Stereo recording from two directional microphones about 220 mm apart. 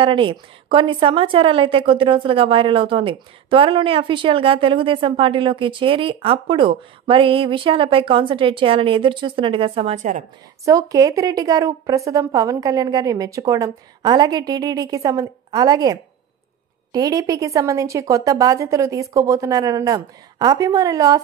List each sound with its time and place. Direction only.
0.0 s a woman's voice: 20° right (ahead or behind)
10.6 s a woman's voice: 15° right (ahead or behind)